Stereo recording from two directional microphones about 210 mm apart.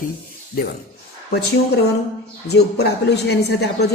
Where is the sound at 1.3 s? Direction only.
50° left (ahead or behind).